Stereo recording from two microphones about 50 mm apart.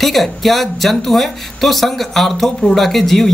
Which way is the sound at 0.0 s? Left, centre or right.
Centre.